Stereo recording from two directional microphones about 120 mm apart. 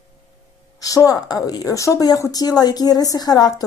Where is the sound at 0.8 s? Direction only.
30° left (ahead or behind).